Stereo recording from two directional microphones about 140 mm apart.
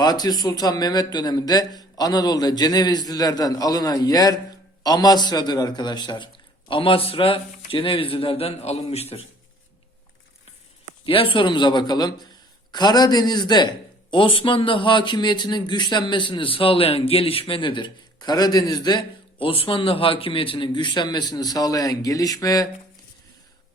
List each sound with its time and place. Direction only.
0.0 s a man's voice: 30° left (ahead or behind); by 9.2 s 45° left (ahead or behind)
11.0 s a man's voice: 40° left (ahead or behind)